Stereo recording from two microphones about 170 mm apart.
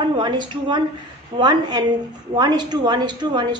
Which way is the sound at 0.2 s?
25° right (ahead or behind).